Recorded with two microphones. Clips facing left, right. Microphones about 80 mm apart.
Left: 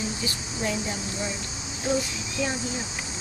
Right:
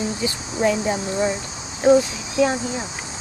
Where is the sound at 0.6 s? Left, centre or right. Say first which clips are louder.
Right 10 dB; right.